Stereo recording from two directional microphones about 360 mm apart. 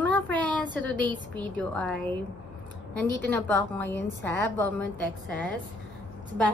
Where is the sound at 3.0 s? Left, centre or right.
Centre.